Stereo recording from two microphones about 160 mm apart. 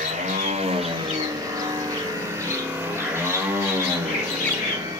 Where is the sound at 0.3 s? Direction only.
45° right (ahead or behind).